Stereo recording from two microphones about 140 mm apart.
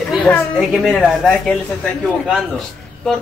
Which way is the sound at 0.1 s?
5° right (ahead or behind).